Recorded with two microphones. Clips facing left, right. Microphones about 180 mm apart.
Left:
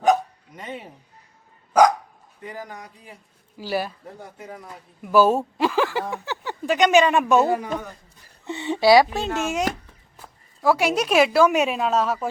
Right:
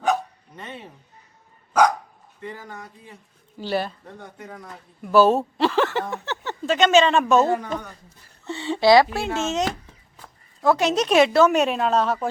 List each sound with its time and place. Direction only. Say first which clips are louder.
0.1 s dog: left 4 dB; 10° left (ahead or behind)
2.4 s a man's voice: even; 15° left (ahead or behind)
8.4 s a sound: even; 15° left (ahead or behind)
9.1 s speech: even; 15° right (ahead or behind)
9.4 s a man's voice: right 1 dB; 10° left (ahead or behind)